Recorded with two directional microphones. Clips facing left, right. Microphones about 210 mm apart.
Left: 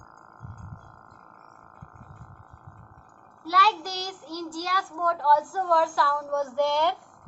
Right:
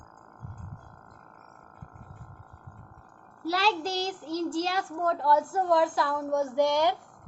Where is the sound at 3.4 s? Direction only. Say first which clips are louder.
Even; 30° right (ahead or behind).